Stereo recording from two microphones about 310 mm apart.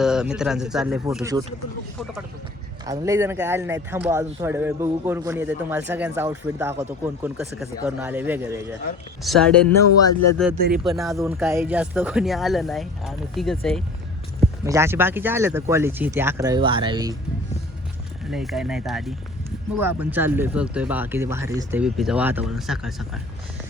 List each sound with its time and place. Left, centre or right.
0.0 s speech: centre
2.8 s speech: centre
10.5 s speech: right
10.8 s speech: centre
18.3 s speech: centre